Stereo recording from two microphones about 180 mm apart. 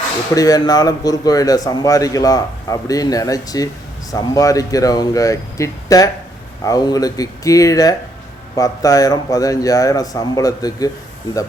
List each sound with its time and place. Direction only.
0.3 s a man's voice: 20° left (ahead or behind)